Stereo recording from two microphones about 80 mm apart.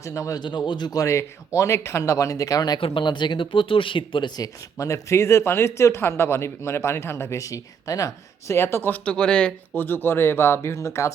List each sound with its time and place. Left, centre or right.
0.0 s speech: left
0.3 s speech: left
2.9 s speech: left
4.4 s speech: left
9.0 s speech: centre
9.7 s speech: left